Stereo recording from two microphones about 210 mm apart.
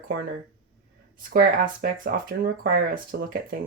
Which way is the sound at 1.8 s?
45° right (ahead or behind).